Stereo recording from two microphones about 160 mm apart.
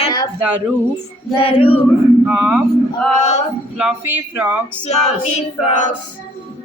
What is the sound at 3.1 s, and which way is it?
Male singing, 45° left (ahead or behind).